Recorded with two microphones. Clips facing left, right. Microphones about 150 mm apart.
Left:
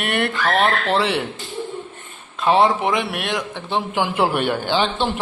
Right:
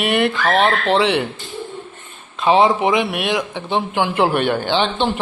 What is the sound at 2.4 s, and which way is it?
A man's voice, centre (ahead or behind).